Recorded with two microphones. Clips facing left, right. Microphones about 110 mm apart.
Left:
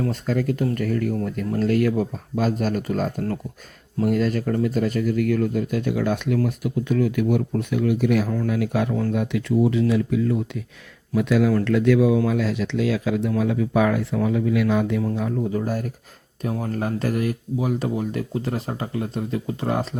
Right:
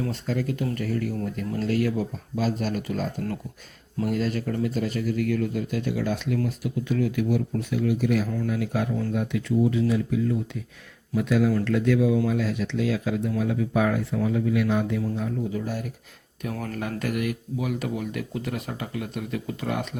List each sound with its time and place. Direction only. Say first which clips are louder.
0.0 s speech: left 4 dB; 50° left (ahead or behind); by 10.6 s 75° left (ahead or behind)
11.1 s speech: left 3 dB; 90° left
15.5 s speech: left 5 dB; 45° left (ahead or behind)
16.4 s speech: left 5 dB; 30° left (ahead or behind)